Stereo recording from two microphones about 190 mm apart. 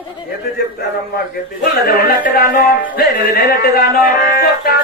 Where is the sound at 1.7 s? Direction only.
55° left (ahead or behind).